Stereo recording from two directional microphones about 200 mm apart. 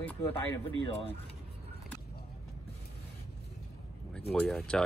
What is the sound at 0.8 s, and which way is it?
Speech, 30° left (ahead or behind).